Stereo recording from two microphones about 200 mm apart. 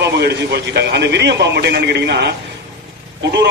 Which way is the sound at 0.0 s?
55° right (ahead or behind).